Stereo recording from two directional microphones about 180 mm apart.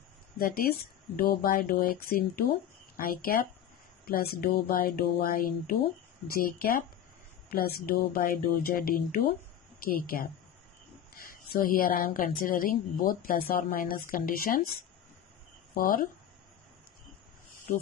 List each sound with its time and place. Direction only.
0.4 s a woman's voice: 50° left (ahead or behind)
15.7 s a woman's voice: 50° left (ahead or behind)